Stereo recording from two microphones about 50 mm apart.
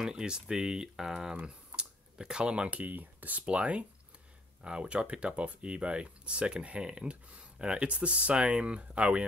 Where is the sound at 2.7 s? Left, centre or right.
Right.